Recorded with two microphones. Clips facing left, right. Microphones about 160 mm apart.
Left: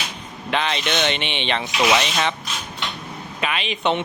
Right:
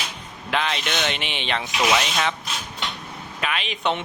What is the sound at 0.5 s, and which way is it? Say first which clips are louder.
A man's voice: left 2 dB; centre (ahead or behind).